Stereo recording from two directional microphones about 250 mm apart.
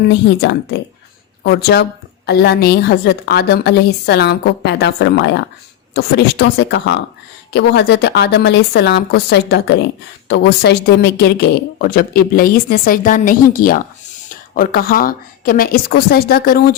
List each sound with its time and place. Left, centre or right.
0.1 s a woman's voice: left